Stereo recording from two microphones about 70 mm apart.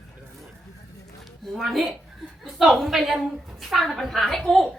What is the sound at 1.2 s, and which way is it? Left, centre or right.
A woman's voice, centre.